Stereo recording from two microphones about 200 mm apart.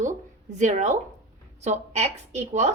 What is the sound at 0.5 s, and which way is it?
A woman's voice, 35° right (ahead or behind).